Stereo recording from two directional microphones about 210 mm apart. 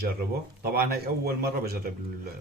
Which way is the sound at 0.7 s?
50° right (ahead or behind).